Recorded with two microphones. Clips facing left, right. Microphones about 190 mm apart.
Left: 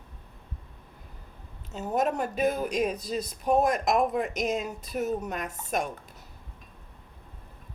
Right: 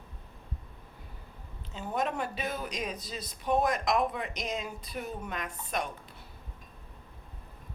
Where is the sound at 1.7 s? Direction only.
45° left (ahead or behind).